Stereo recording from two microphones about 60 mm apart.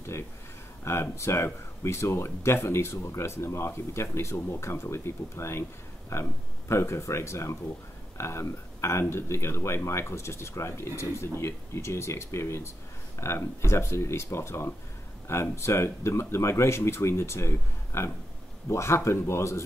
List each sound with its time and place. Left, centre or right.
0.8 s speech: left